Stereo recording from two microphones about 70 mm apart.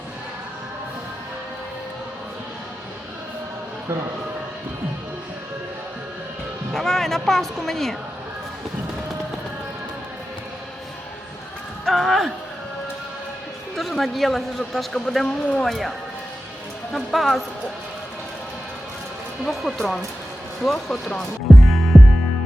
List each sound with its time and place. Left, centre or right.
6.7 s speech: centre
11.9 s a man's voice: centre
13.7 s a man's voice: centre
16.9 s a man's voice: centre
19.5 s a man's voice: centre
21.5 s music: centre